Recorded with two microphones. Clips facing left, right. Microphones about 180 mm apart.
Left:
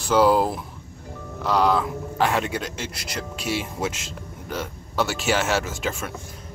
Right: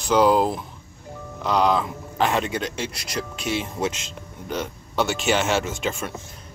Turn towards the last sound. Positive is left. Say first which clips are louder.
# right 2 dB
turn(degrees=5)  # may be behind; listen again after turning